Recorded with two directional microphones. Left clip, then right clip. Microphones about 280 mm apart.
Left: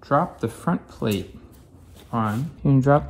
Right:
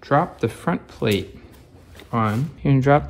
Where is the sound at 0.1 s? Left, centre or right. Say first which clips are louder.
Right 2 dB; left.